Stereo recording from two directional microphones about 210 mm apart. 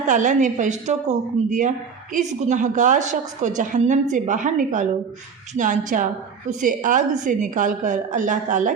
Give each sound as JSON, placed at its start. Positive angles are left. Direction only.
{"t": 0.1, "sound": "a woman's voice", "side_deg": -35}